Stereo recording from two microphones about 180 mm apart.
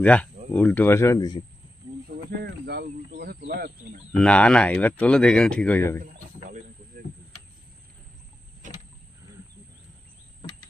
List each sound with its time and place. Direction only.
0.0 s speech: 5° left (ahead or behind)
2.0 s bird: 60° right (ahead or behind)
4.2 s speech: 5° left (ahead or behind)